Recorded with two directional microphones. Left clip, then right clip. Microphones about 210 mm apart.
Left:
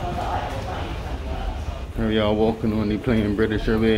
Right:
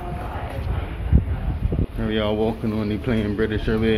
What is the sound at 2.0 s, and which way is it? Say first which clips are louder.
Speech: left 2 dB; 15° left (ahead or behind).